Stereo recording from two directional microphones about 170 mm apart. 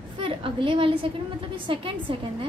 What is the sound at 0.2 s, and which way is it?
A woman's voice, 30° right (ahead or behind).